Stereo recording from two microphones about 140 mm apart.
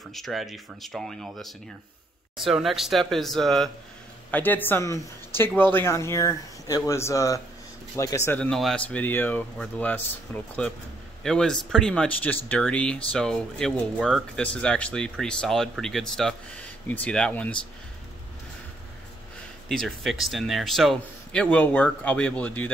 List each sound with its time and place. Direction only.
0.1 s speech: centre (ahead or behind)
4.3 s speech: 15° left (ahead or behind)
8.4 s speech: 5° left (ahead or behind)
19.7 s speech: centre (ahead or behind)